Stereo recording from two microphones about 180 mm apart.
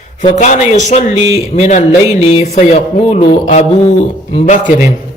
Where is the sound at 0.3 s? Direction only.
45° left (ahead or behind).